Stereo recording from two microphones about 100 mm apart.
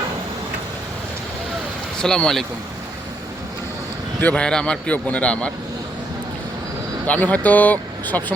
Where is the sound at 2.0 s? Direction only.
5° left (ahead or behind).